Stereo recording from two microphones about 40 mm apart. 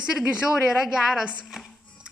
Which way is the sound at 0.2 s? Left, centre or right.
Right.